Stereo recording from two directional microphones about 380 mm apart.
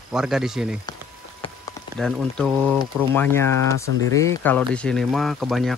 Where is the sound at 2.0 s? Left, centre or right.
Centre.